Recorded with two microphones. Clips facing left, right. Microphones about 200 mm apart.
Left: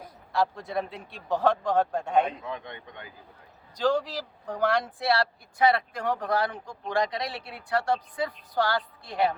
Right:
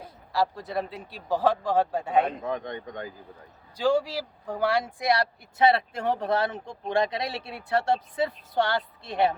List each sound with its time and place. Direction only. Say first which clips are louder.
0.3 s a man's voice: even; centre (ahead or behind)
2.2 s a man's voice: right 4 dB; 45° right (ahead or behind)
3.8 s speech: right 2 dB; 10° right (ahead or behind)